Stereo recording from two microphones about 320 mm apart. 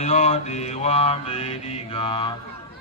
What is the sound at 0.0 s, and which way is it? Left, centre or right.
Mantra, centre.